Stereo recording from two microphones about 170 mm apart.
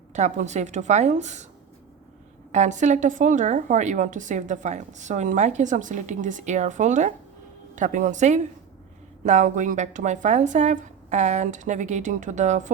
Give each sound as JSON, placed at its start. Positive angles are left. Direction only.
{"t": 0.1, "sound": "a woman's voice", "side_deg": -45}
{"t": 2.5, "sound": "a woman's voice", "side_deg": -45}